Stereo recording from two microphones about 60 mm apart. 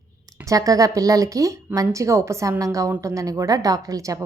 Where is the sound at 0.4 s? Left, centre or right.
Right.